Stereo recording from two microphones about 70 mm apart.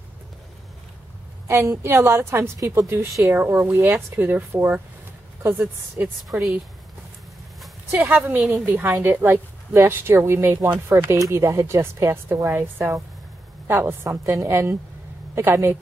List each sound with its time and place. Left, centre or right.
1.5 s a woman's voice: right
3.3 s a woman's voice: right
8.0 s a woman's voice: right